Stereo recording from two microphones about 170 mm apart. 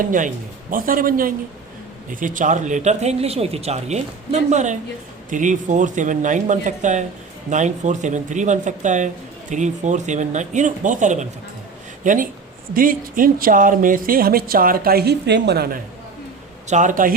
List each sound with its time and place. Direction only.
0.0 s speech: 50° right (ahead or behind); by 15.8 s 70° right (ahead or behind)
16.6 s speech: 45° right (ahead or behind)